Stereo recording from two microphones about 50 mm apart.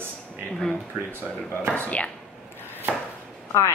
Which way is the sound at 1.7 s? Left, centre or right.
Left.